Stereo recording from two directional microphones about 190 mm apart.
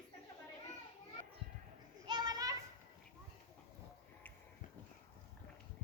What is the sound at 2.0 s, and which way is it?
Children playing, 20° right (ahead or behind).